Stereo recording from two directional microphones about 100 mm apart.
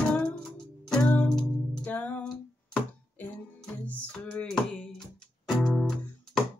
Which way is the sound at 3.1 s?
15° left (ahead or behind).